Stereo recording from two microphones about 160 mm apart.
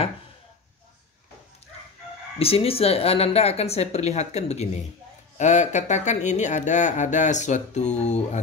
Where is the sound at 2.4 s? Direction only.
35° left (ahead or behind).